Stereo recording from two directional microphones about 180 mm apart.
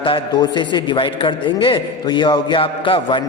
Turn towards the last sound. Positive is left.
turn(degrees=25)  # may be behind; listen again after turning